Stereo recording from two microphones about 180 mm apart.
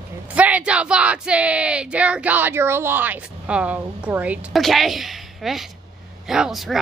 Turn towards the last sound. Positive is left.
turn(degrees=0)  # may be behind; listen again after turning